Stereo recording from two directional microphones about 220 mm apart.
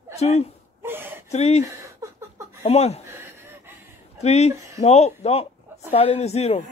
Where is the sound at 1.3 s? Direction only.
30° left (ahead or behind).